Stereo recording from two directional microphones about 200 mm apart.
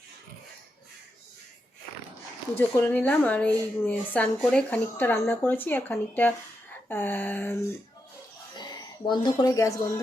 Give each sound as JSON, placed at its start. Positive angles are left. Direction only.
{"t": 2.6, "sound": "a woman's voice", "side_deg": 10}
{"t": 8.5, "sound": "speech", "side_deg": 20}